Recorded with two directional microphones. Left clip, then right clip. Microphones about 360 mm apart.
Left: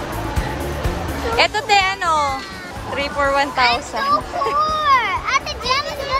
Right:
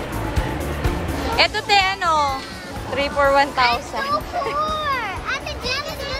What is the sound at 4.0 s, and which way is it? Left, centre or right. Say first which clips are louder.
Children playing: left 4 dB; left.